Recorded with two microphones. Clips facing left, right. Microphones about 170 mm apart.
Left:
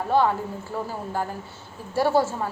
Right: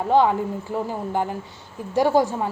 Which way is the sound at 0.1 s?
15° right (ahead or behind).